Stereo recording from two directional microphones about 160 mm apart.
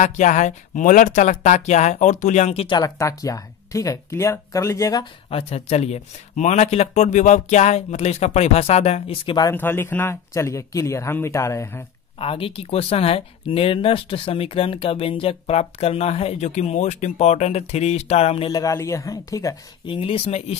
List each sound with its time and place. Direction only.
0.0 s speech: 50° left (ahead or behind)
2.8 s speech: 20° left (ahead or behind)
5.3 s speech: 40° left (ahead or behind)
9.5 s speech: 15° left (ahead or behind)
12.2 s speech: 35° left (ahead or behind)
18.5 s speech: 20° left (ahead or behind)
19.9 s speech: 35° left (ahead or behind)